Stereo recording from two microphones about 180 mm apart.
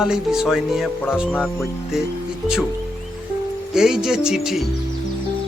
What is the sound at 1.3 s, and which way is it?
Speech, 10° left (ahead or behind).